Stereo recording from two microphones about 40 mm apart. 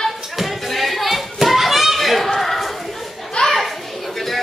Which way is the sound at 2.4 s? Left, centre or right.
Centre.